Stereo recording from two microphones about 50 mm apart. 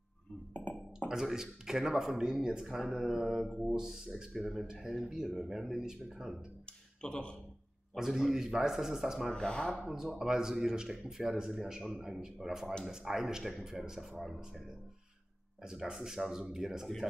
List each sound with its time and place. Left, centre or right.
0.5 s a sound: left
0.9 s speech: centre
7.0 s speech: centre
7.9 s speech: centre
9.3 s speech: centre
9.8 s speech: centre
15.6 s speech: centre